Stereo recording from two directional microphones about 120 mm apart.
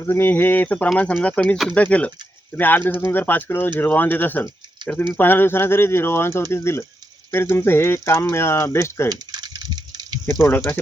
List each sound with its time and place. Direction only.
0.0 s speech: 20° left (ahead or behind)
4.8 s a sound: 40° right (ahead or behind)
5.1 s speech: 15° left (ahead or behind)
9.0 s typing: 35° right (ahead or behind)
10.2 s speech: 15° left (ahead or behind)